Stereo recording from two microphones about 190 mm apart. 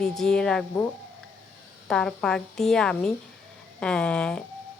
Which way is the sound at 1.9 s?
5° left (ahead or behind).